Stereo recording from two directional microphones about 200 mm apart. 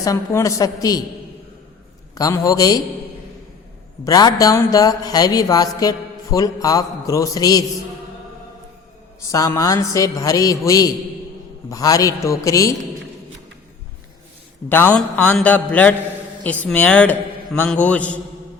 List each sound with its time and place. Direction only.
0.0 s speech: 15° left (ahead or behind)
2.1 s speech: 15° left (ahead or behind)
4.0 s speech: 20° left (ahead or behind)
9.2 s speech: 15° left (ahead or behind)
14.7 s speech: 10° left (ahead or behind)